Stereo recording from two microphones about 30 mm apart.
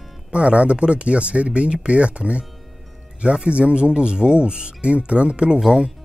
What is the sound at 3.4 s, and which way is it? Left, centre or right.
Speech, right.